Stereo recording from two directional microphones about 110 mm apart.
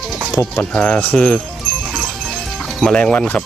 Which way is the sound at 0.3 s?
10° left (ahead or behind).